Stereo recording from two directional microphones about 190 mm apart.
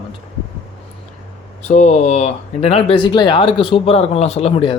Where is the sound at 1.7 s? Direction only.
40° left (ahead or behind).